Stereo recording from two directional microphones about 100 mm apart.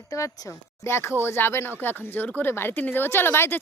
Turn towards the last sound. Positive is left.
turn(degrees=25)  # may be behind; listen again after turning